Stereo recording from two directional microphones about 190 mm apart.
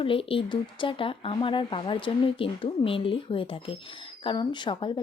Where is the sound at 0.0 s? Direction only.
30° left (ahead or behind).